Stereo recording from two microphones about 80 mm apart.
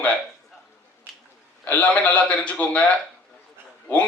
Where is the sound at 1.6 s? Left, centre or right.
Centre.